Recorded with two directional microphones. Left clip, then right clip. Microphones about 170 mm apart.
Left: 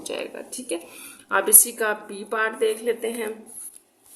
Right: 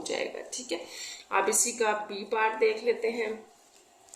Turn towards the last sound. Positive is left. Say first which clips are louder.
# left 2 dB
turn(degrees=45)  # may be behind; listen again after turning